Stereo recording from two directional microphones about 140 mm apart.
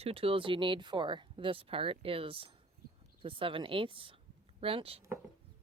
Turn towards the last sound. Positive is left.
turn(degrees=-40)  # may be behind; listen again after turning